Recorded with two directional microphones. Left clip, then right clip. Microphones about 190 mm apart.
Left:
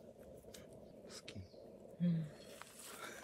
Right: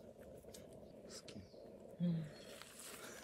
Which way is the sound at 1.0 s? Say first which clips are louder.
Left 2 dB; 25° left (ahead or behind).